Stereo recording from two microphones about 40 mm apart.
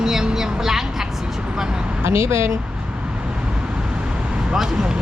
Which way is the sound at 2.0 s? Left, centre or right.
Right.